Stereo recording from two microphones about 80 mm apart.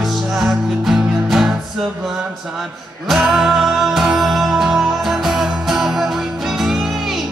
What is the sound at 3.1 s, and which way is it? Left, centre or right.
Music, centre.